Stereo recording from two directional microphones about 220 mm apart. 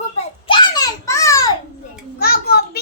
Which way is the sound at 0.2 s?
20° left (ahead or behind).